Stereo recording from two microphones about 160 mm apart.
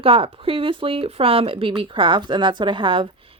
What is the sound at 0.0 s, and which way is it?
Speech, 35° right (ahead or behind).